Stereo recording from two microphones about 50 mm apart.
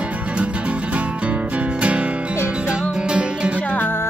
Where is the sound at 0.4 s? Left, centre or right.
Right.